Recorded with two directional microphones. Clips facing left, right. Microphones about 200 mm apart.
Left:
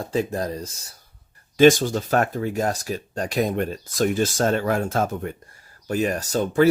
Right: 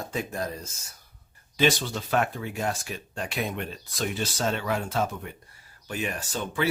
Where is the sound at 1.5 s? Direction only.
45° left (ahead or behind).